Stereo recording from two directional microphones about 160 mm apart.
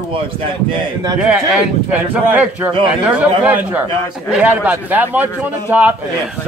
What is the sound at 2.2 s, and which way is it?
A man's voice, 10° right (ahead or behind).